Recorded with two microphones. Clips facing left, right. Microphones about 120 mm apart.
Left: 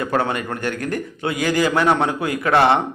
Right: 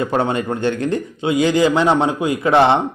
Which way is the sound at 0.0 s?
25° right (ahead or behind).